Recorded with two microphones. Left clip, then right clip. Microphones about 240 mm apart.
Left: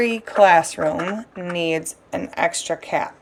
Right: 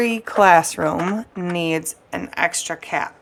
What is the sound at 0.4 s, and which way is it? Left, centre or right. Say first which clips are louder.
Speech: right 1 dB; right.